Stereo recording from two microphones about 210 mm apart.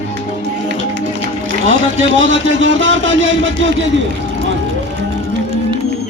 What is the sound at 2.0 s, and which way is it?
Speech, 65° right (ahead or behind).